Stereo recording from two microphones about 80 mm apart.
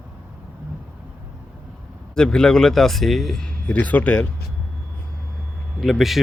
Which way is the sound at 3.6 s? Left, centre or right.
Centre.